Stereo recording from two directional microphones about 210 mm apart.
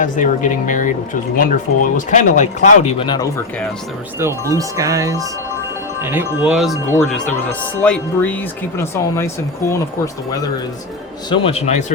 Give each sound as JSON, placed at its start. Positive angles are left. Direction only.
{"t": 0.0, "sound": "speech", "side_deg": 40}
{"t": 4.2, "sound": "speech", "side_deg": -15}
{"t": 6.0, "sound": "chime", "side_deg": -10}
{"t": 7.8, "sound": "speech", "side_deg": 10}
{"t": 11.3, "sound": "speech", "side_deg": 25}